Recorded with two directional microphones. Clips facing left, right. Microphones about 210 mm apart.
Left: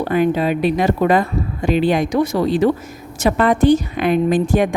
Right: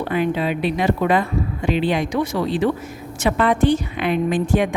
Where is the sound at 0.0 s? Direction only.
45° left (ahead or behind).